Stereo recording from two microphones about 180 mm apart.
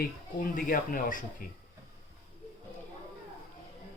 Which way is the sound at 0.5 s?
50° left (ahead or behind).